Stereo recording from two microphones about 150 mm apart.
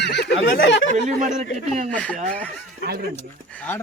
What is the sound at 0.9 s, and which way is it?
Speech, 55° right (ahead or behind).